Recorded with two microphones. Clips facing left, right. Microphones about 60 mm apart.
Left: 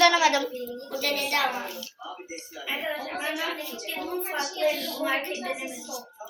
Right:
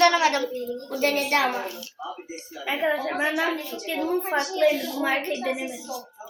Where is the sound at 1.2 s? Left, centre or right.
Right.